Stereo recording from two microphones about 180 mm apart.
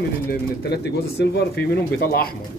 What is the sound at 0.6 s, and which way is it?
Speech, 65° left (ahead or behind).